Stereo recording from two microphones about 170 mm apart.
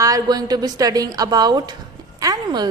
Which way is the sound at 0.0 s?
20° right (ahead or behind).